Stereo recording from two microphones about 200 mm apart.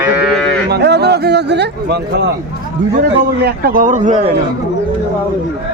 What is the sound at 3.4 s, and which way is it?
Speech, 50° right (ahead or behind).